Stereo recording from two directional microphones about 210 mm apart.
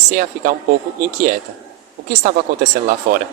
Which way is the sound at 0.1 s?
35° right (ahead or behind).